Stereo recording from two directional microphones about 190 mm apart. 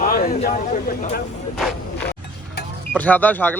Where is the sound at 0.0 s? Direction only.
50° left (ahead or behind).